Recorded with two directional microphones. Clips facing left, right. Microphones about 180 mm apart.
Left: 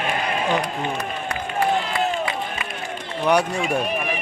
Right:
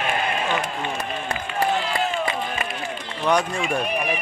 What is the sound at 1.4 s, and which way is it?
Run, 45° left (ahead or behind).